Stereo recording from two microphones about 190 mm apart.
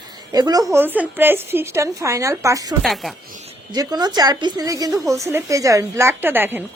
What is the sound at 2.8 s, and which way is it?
Speech, centre (ahead or behind).